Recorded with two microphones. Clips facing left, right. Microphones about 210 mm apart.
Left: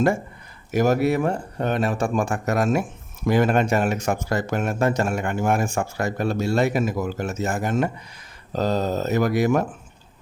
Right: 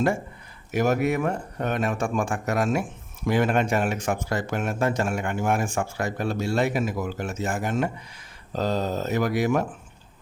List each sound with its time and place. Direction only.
0.7 s speech: 40° left (ahead or behind)